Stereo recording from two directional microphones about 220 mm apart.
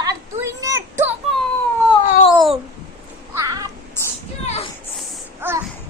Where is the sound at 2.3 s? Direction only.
Centre (ahead or behind).